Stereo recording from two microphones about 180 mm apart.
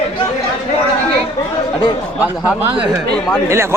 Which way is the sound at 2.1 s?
10° right (ahead or behind).